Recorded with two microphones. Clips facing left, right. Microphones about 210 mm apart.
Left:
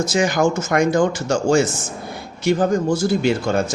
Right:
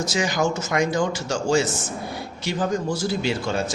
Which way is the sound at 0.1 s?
50° left (ahead or behind).